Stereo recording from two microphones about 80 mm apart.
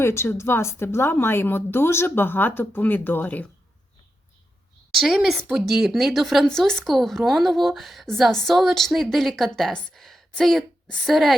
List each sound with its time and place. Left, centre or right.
0.0 s speech: left
4.9 s speech: centre